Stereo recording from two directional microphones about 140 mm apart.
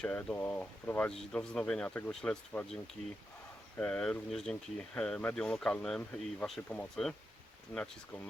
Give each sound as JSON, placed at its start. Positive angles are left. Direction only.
{"t": 0.0, "sound": "speech", "side_deg": 5}
{"t": 3.8, "sound": "speech", "side_deg": 10}